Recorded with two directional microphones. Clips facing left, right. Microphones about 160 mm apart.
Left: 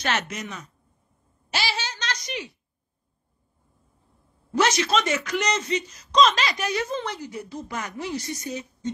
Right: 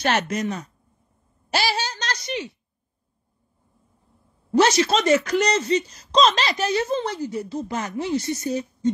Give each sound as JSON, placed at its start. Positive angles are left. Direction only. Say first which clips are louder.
{"t": 0.0, "sound": "speech", "louder": "right 6 dB", "side_deg": -45}
{"t": 1.5, "sound": "a sound", "louder": "right 5 dB", "side_deg": -40}
{"t": 4.5, "sound": "speech", "louder": "right 4 dB", "side_deg": -30}
{"t": 8.5, "sound": "speech", "louder": "right 8 dB", "side_deg": -40}